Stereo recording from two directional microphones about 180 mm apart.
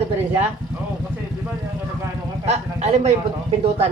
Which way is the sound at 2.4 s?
40° right (ahead or behind).